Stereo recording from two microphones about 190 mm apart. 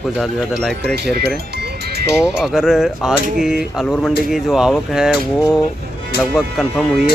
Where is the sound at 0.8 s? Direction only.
60° right (ahead or behind).